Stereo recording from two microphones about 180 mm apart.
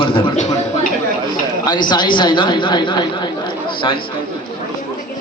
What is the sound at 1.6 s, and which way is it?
A man's voice, 25° left (ahead or behind).